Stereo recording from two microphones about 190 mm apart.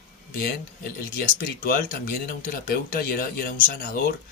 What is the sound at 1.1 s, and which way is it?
Speech, 50° left (ahead or behind).